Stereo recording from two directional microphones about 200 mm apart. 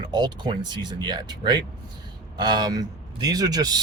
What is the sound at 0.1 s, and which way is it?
A man's voice, 20° right (ahead or behind).